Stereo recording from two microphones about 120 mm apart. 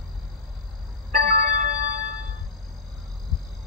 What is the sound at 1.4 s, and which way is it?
Music, 90° right.